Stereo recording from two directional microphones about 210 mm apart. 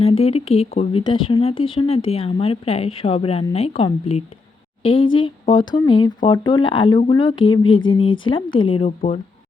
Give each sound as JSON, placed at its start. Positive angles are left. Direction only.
{"t": 0.0, "sound": "speech", "side_deg": 30}